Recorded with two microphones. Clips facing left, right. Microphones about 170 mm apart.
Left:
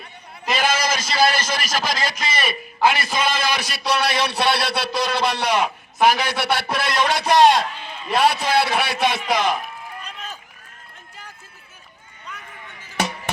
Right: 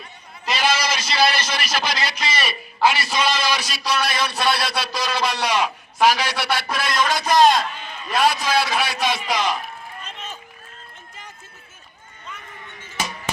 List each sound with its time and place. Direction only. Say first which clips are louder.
0.5 s a man's voice: left 1 dB; 50° left (ahead or behind)
13.0 s insect: left 3 dB; 65° left (ahead or behind)